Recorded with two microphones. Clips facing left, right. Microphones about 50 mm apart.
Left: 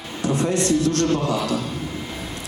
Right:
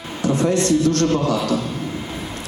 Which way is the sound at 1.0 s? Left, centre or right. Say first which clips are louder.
Right 2 dB; right.